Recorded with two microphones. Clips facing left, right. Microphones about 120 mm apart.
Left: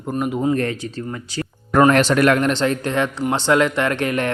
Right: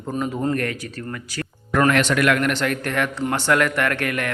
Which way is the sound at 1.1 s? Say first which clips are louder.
Left 3 dB; 25° left (ahead or behind).